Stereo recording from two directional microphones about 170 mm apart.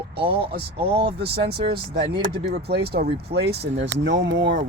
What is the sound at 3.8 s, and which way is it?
Speech, 90° right.